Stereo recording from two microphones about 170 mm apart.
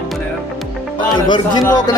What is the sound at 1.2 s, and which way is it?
Speech, 25° left (ahead or behind).